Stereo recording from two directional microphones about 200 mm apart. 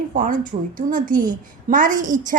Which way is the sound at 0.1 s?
40° right (ahead or behind).